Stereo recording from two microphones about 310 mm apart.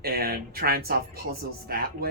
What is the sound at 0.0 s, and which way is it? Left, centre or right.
Speech, right.